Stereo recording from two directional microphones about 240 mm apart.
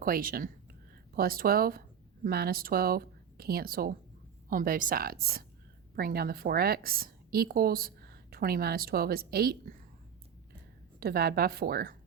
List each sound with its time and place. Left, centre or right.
0.0 s a woman's voice: right
11.0 s a woman's voice: right